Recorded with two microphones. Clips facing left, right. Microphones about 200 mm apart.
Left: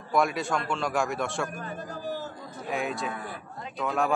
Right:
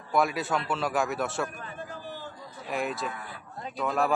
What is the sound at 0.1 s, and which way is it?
Speech, centre (ahead or behind).